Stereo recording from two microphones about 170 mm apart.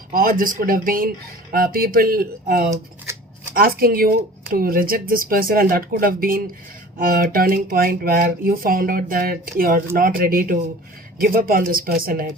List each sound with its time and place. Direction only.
0.1 s speech: 55° right (ahead or behind)